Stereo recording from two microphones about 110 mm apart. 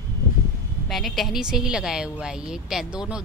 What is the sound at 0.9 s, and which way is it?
A woman's voice, centre (ahead or behind).